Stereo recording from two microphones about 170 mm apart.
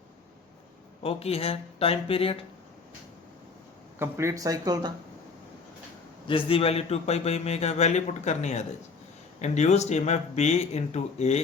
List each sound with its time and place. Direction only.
1.0 s a man's voice: 35° left (ahead or behind)
3.9 s speech: 15° right (ahead or behind)
6.2 s a man's voice: 30° left (ahead or behind)